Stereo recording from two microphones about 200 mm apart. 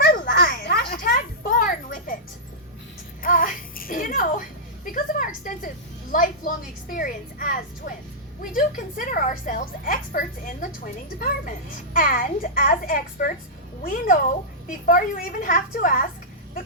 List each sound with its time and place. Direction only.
0.0 s children playing: 50° left (ahead or behind)
3.2 s music: 45° left (ahead or behind)
8.5 s a woman's voice: 45° left (ahead or behind)
11.9 s a child's voice: 45° left (ahead or behind)